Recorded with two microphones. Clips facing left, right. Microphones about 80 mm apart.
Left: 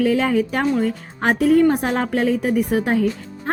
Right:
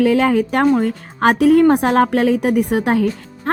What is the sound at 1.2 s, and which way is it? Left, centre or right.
A woman's voice, right.